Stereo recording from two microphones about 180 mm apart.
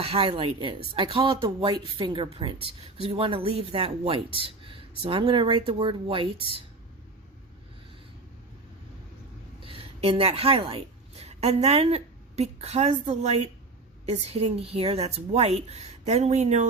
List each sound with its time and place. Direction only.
0.0 s a woman's voice: 30° right (ahead or behind)
9.6 s a woman's voice: 30° right (ahead or behind)